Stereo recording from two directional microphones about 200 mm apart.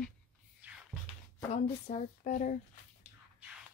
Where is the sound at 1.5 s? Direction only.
35° left (ahead or behind).